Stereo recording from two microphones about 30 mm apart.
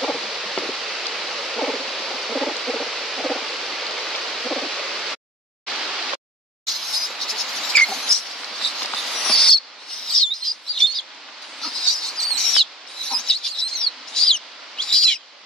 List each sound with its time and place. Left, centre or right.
0.0 s a sound: centre
7.2 s cricket: centre
7.9 s rodents: centre
8.4 s mouse: centre
9.2 s bird vocalization: left
11.6 s bird: centre
13.0 s chicken: left